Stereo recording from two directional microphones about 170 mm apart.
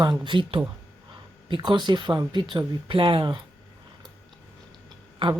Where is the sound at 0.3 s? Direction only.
30° right (ahead or behind).